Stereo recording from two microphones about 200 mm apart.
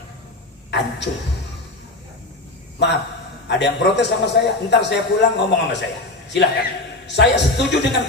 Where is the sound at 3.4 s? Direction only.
60° left (ahead or behind).